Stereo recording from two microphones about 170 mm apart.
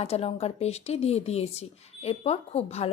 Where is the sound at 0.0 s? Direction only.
40° left (ahead or behind).